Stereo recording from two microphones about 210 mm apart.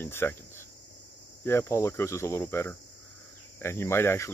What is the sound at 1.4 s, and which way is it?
Cricket, 10° left (ahead or behind).